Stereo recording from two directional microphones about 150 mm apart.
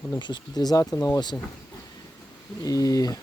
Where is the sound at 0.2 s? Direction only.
30° left (ahead or behind).